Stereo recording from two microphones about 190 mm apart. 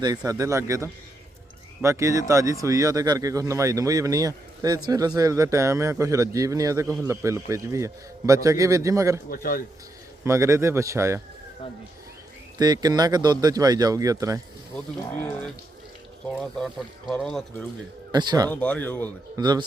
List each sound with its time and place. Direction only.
0.2 s speech: 15° right (ahead or behind)
9.3 s speech: 50° left (ahead or behind)
10.2 s speech: 15° right (ahead or behind)
12.5 s speech: 20° right (ahead or behind)
14.8 s speech: 10° left (ahead or behind)
18.1 s speech: 20° right (ahead or behind)
18.5 s speech: 5° left (ahead or behind)
19.4 s speech: 20° right (ahead or behind)